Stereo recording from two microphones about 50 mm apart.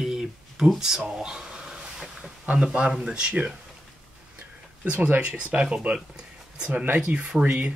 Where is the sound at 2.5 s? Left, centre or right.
Centre.